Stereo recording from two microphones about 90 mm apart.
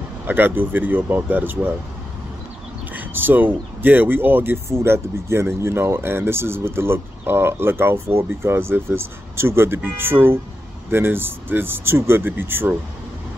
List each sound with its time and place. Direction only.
0.3 s speech: 20° right (ahead or behind)
2.9 s speech: 20° right (ahead or behind)